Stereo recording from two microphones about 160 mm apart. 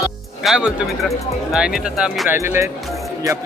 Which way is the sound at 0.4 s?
5° right (ahead or behind).